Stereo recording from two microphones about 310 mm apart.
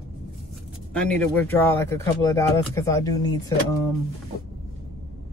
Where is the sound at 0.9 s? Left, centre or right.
Centre.